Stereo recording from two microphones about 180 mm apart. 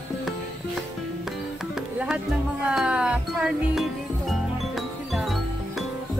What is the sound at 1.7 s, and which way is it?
Music, 5° right (ahead or behind).